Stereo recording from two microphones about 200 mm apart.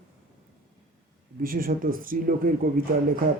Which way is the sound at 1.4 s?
45° right (ahead or behind).